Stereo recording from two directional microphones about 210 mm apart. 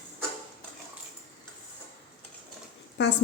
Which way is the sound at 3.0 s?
55° left (ahead or behind).